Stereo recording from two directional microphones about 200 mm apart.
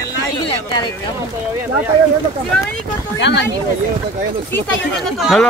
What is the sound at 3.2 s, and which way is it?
Speech, 60° left (ahead or behind).